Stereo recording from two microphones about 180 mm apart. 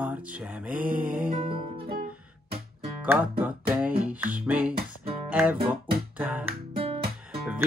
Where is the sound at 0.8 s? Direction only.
50° right (ahead or behind).